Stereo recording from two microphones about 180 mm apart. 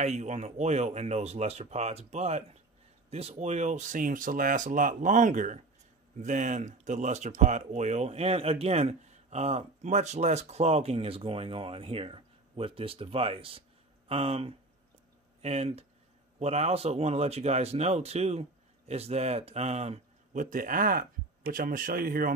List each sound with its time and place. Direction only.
0.0 s speech: 40° right (ahead or behind)